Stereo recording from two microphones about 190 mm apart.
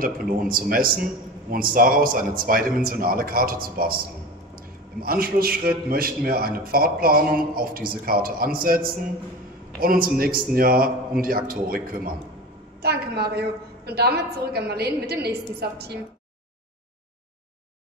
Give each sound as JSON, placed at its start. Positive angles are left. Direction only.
{"t": 0.0, "sound": "a man's voice", "side_deg": -50}
{"t": 5.0, "sound": "a man's voice", "side_deg": -50}